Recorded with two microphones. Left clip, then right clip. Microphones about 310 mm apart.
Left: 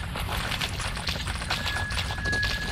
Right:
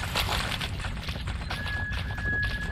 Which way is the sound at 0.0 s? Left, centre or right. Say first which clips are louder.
Right 3 dB; centre.